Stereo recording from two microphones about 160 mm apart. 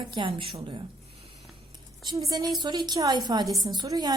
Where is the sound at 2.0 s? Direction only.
20° right (ahead or behind).